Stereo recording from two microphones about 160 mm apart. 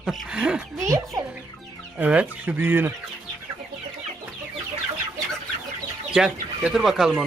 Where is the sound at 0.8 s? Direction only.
20° right (ahead or behind).